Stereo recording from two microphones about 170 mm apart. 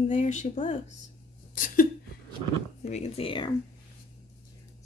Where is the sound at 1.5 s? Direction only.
55° left (ahead or behind).